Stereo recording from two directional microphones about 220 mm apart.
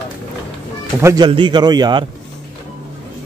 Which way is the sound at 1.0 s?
10° right (ahead or behind).